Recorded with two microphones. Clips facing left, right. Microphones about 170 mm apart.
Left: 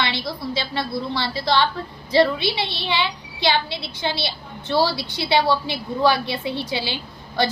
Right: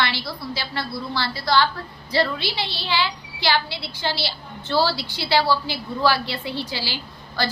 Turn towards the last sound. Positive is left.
turn(degrees=20)  # may be behind; listen again after turning